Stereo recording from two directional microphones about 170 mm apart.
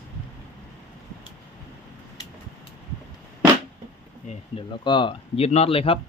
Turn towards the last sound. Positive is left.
turn(degrees=35)  # may be behind; listen again after turning